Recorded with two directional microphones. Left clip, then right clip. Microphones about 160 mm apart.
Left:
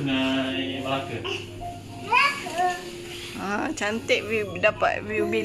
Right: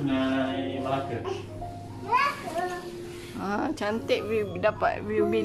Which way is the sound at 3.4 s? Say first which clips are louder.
Left 2 dB; 5° right (ahead or behind).